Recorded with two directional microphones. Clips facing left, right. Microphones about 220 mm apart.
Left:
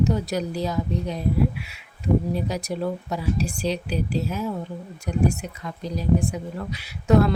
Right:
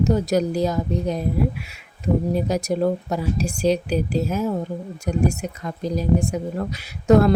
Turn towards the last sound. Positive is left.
turn(degrees=-45)  # may be behind; listen again after turning